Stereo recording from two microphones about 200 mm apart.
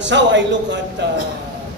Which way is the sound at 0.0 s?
65° right (ahead or behind).